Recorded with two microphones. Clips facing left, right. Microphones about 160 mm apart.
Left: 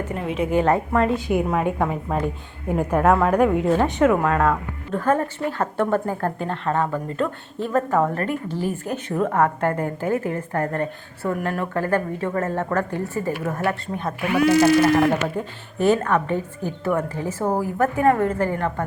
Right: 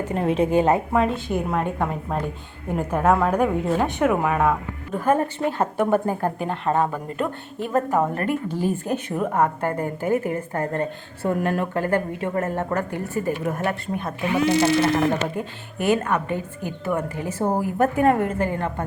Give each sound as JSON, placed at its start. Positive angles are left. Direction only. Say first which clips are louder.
{"t": 0.1, "sound": "a woman's voice", "louder": "right 8 dB", "side_deg": -35}
{"t": 0.5, "sound": "a woman's voice", "louder": "left 1 dB", "side_deg": -20}
{"t": 0.9, "sound": "a woman's voice", "louder": "left 2 dB", "side_deg": -5}
{"t": 15.8, "sound": "a woman's voice", "louder": "left 3 dB", "side_deg": -15}